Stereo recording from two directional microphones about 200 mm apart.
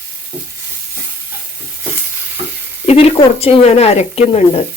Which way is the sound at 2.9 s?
30° left (ahead or behind).